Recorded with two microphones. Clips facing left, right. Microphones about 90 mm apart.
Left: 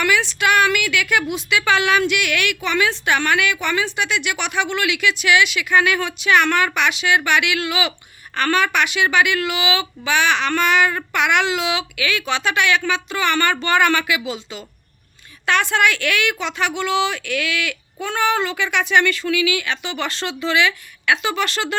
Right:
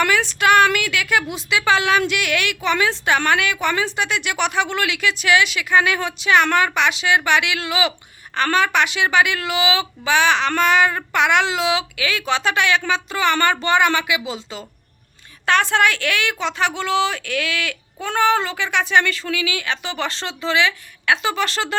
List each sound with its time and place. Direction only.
0.0 s a woman's voice: 40° right (ahead or behind)